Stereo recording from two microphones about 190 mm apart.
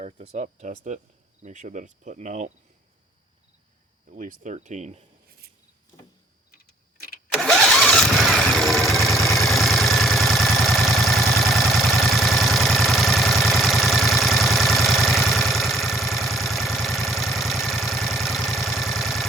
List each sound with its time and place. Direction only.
0.0 s speech: 35° right (ahead or behind)
4.1 s speech: 40° right (ahead or behind)
7.3 s engine starting: centre (ahead or behind)
9.4 s engine: centre (ahead or behind)